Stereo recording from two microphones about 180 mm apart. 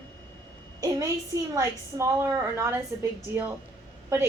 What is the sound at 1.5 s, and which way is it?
A woman's voice, 15° right (ahead or behind).